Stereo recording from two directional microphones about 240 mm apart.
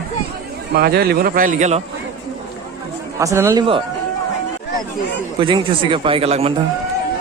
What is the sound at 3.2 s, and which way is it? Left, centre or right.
Speech, centre.